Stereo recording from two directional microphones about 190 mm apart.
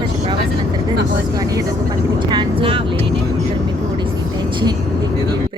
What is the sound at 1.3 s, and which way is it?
A woman's voice, 20° right (ahead or behind).